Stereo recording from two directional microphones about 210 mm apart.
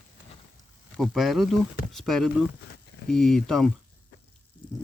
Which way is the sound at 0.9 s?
Centre (ahead or behind).